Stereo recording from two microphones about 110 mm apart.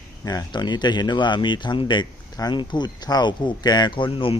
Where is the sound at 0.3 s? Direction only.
35° left (ahead or behind).